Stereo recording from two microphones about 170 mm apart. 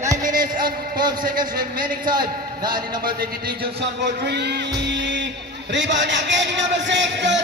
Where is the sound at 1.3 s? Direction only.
25° right (ahead or behind).